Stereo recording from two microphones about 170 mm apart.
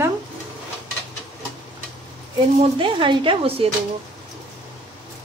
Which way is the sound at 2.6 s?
30° right (ahead or behind).